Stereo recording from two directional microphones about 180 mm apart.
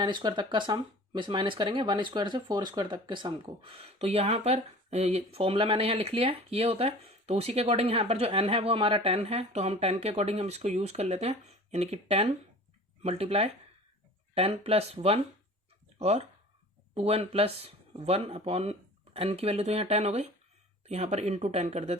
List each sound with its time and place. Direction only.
0.0 s speech: 25° right (ahead or behind)